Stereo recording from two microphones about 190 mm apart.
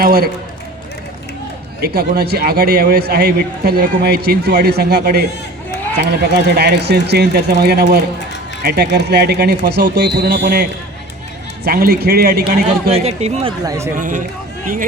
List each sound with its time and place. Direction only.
0.0 s speech: 55° right (ahead or behind)
1.8 s a man's voice: 55° right (ahead or behind)
12.6 s speech: 35° right (ahead or behind)
13.7 s speech: 15° right (ahead or behind)
13.9 s speech: 45° right (ahead or behind)